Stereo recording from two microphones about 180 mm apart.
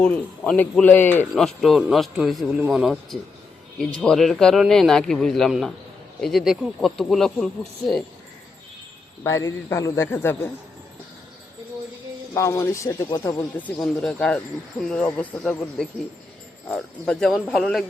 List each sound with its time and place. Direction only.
0.0 s a man's voice: 5° left (ahead or behind)
9.2 s a man's voice: 15° left (ahead or behind)
12.3 s a man's voice: 15° left (ahead or behind)
13.6 s a man's voice: 10° left (ahead or behind)